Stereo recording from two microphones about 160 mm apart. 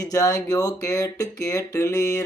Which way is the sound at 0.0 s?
20° left (ahead or behind).